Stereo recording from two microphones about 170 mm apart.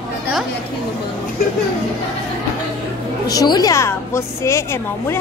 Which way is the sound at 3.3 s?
25° left (ahead or behind).